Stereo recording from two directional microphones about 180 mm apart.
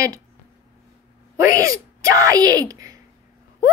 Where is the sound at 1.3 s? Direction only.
20° right (ahead or behind).